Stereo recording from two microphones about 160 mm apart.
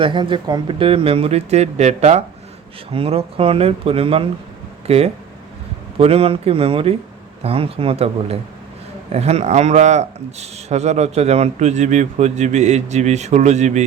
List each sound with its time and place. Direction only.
0.0 s a man's voice: 30° right (ahead or behind); by 13.8 s 45° right (ahead or behind)